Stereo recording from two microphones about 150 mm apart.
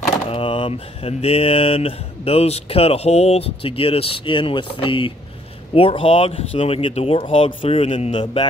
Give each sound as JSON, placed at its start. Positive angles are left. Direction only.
{"t": 0.3, "sound": "speech", "side_deg": 35}